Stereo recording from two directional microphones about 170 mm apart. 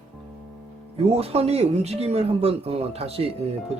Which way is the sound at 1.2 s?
35° right (ahead or behind).